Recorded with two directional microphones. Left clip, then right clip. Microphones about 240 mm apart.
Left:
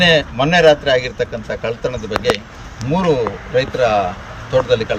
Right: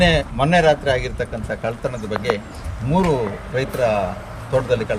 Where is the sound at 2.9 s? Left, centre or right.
Centre.